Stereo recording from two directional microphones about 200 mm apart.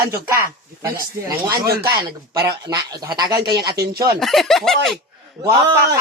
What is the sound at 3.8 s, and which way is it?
Speech, 50° right (ahead or behind).